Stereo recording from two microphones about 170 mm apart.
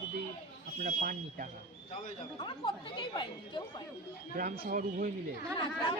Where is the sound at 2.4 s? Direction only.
30° left (ahead or behind).